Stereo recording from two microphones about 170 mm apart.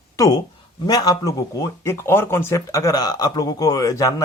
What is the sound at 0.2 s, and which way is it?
Speech, 20° left (ahead or behind).